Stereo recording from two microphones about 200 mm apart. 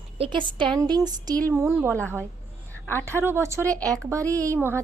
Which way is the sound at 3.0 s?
10° right (ahead or behind).